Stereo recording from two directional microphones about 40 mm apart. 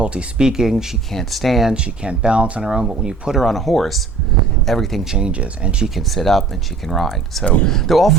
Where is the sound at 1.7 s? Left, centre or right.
Right.